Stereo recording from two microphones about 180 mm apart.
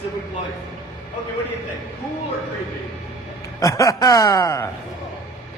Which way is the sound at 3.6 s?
20° left (ahead or behind).